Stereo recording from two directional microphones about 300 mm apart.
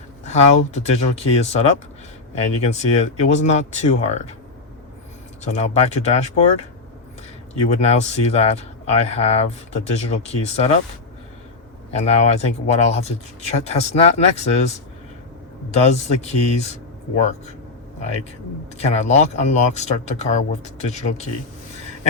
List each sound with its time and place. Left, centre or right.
0.3 s speech: left
5.5 s speech: left
7.8 s speech: left
11.9 s speech: left
15.8 s speech: left
18.8 s speech: left